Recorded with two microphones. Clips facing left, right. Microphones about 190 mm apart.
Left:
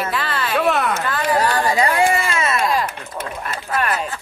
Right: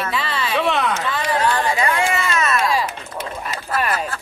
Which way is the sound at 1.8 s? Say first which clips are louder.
Left 3 dB; 35° left (ahead or behind).